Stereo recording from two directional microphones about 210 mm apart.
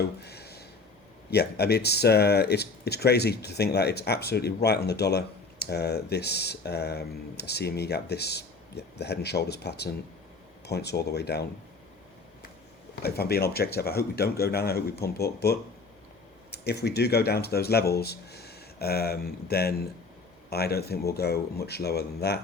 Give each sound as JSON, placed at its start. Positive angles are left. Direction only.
{"t": 0.2, "sound": "a sound", "side_deg": 50}
{"t": 1.3, "sound": "speech", "side_deg": 50}
{"t": 13.0, "sound": "speech", "side_deg": 50}